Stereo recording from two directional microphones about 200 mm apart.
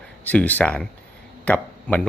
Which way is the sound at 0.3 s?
10° left (ahead or behind).